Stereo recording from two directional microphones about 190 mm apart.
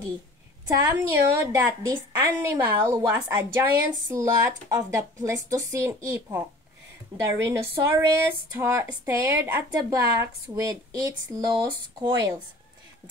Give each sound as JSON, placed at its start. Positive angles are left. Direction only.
{"t": 0.8, "sound": "a woman's voice", "side_deg": -15}